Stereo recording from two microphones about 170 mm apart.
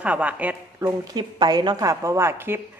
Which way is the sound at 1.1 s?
25° right (ahead or behind).